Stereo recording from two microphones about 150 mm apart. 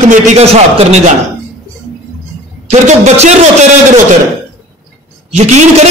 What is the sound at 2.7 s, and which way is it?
A man's voice, 50° right (ahead or behind).